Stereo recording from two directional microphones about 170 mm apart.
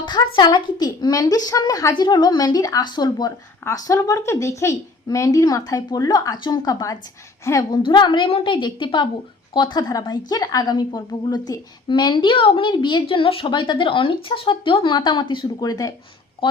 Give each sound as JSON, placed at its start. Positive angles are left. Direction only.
{"t": 0.0, "sound": "a sound", "side_deg": 25}
{"t": 0.3, "sound": "a woman's voice", "side_deg": 25}
{"t": 7.8, "sound": "a woman's voice", "side_deg": 25}